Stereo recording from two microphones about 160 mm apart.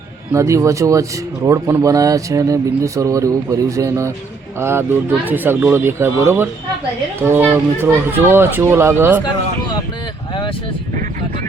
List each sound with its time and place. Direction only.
0.3 s speech: 20° right (ahead or behind)